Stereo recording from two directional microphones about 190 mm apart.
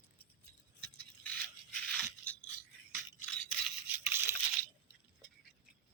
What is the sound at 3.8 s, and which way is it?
Toothbrush, 10° right (ahead or behind).